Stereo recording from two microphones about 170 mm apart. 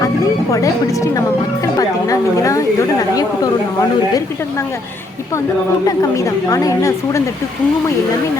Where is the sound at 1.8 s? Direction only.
20° left (ahead or behind).